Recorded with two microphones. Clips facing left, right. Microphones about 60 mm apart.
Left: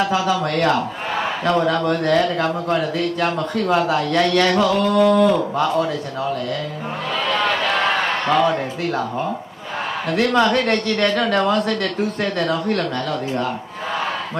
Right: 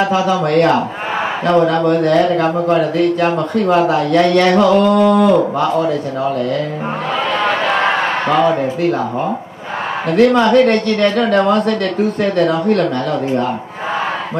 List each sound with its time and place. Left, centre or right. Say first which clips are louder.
0.1 s speech: right 5 dB; centre
7.3 s a sound: right 4 dB; centre
10.0 s speech: right 6 dB; centre